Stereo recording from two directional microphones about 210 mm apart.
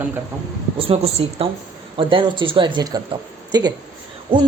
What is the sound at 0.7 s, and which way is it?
A woman's voice, 25° right (ahead or behind).